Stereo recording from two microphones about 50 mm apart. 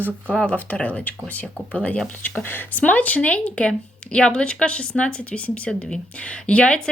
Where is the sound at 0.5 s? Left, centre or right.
Left.